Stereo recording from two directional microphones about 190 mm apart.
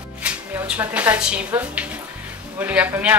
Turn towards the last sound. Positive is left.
turn(degrees=-10)  # may be behind; listen again after turning